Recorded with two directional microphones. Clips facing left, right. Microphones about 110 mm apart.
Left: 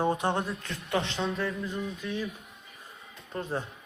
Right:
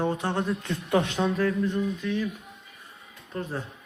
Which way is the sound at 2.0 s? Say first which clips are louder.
Right 5 dB; 15° left (ahead or behind).